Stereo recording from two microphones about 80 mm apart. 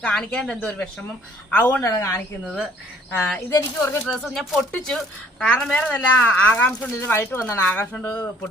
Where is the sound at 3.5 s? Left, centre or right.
Left.